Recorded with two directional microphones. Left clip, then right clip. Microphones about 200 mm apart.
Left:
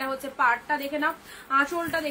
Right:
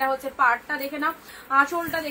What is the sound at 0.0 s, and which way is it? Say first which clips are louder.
A woman's voice: right 3 dB; 15° left (ahead or behind).